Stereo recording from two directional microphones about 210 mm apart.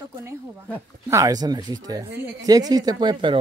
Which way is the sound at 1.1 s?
15° right (ahead or behind).